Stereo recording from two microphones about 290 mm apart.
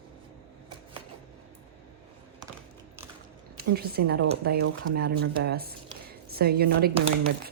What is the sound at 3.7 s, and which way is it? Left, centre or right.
A woman's voice, right.